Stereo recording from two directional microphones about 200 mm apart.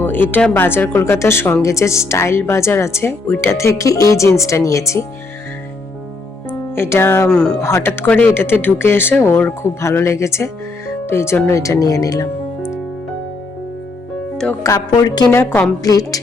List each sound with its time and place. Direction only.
0.0 s speech: 10° left (ahead or behind)
6.5 s speech: 10° left (ahead or behind)
14.6 s speech: 15° left (ahead or behind)